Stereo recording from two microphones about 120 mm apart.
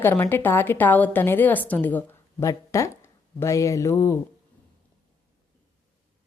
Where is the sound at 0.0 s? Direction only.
20° left (ahead or behind).